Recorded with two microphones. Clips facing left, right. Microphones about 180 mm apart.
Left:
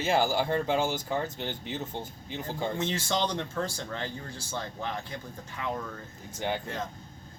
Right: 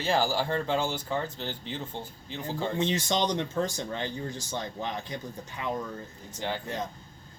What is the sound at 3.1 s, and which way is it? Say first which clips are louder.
Speech: right 2 dB; 15° right (ahead or behind).